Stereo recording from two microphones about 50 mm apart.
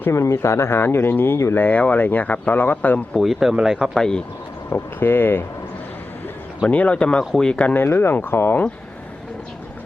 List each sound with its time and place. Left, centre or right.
0.1 s speech: left
0.8 s speech: left
1.5 s speech: left
3.2 s speech: centre
3.9 s speech: centre
4.7 s speech: left
6.7 s speech: left
7.3 s speech: centre
7.5 s speech: left
7.8 s speech: left